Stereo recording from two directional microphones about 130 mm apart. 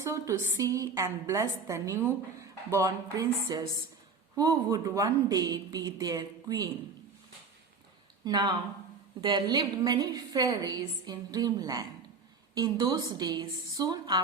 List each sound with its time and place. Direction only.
0.0 s a woman's voice: 25° right (ahead or behind)
8.2 s a woman's voice: 30° right (ahead or behind)